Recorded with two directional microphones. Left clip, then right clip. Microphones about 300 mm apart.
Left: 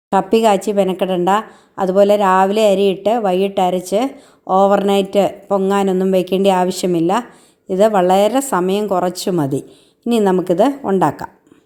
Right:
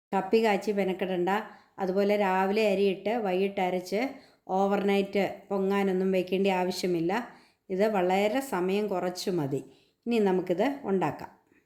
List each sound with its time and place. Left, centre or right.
0.1 s a woman's voice: left